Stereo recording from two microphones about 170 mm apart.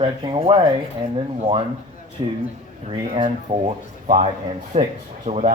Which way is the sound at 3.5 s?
45° right (ahead or behind).